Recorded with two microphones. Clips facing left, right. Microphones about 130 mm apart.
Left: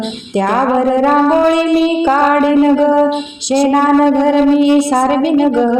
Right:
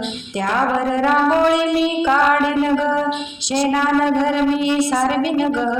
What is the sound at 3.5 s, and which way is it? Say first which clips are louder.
Music: left 7 dB; 50° left (ahead or behind).